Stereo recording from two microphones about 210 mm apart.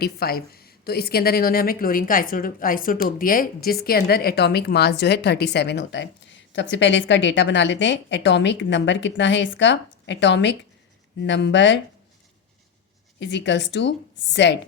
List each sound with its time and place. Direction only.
0.0 s a woman's voice: 45° left (ahead or behind)
13.1 s speech: 55° left (ahead or behind)